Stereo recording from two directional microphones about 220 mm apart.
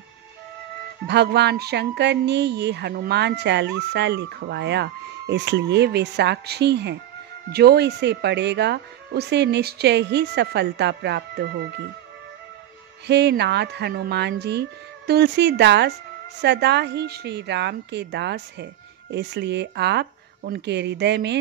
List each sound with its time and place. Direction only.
1.0 s speech: 50° right (ahead or behind)
13.0 s speech: 50° right (ahead or behind)